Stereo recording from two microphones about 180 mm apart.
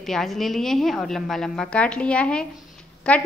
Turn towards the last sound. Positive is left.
turn(degrees=5)  # may be behind; listen again after turning